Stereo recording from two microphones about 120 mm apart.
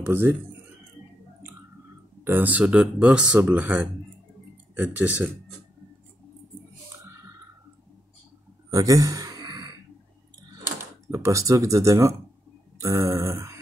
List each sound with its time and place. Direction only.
0.0 s speech: 15° right (ahead or behind)
2.2 s speech: 15° right (ahead or behind)
8.6 s a sound: 30° right (ahead or behind)
10.8 s speech: 25° right (ahead or behind)
12.7 s grunt: 25° right (ahead or behind)